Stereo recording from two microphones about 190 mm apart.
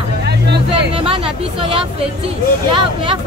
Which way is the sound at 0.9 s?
30° right (ahead or behind).